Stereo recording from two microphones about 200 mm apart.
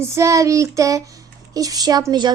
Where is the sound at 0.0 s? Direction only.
15° right (ahead or behind).